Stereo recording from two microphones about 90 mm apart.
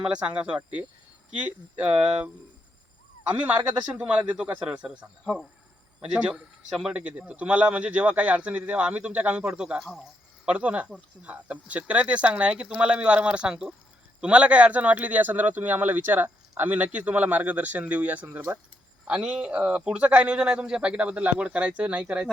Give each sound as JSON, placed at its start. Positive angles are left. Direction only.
{"t": 0.0, "sound": "speech", "side_deg": -10}
{"t": 10.4, "sound": "speech", "side_deg": -15}